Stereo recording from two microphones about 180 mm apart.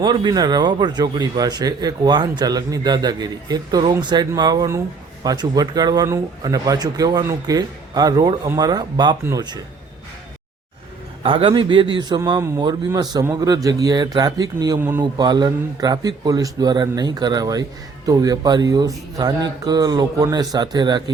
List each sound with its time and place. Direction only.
0.0 s a man's voice: 25° right (ahead or behind)
11.2 s a man's voice: 30° right (ahead or behind); by 15.0 s 15° right (ahead or behind)
15.2 s a man's voice: 25° right (ahead or behind)